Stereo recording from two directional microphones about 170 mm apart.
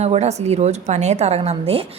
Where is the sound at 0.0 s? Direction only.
40° right (ahead or behind).